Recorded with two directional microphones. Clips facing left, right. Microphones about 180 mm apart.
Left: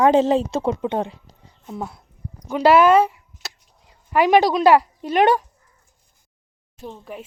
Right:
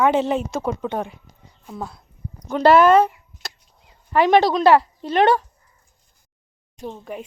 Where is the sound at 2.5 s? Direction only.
10° left (ahead or behind).